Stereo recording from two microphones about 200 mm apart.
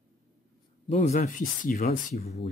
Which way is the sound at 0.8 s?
35° left (ahead or behind).